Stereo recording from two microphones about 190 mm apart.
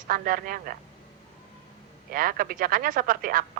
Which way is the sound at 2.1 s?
50° right (ahead or behind).